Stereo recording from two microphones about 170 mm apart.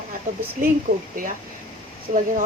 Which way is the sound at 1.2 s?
55° right (ahead or behind).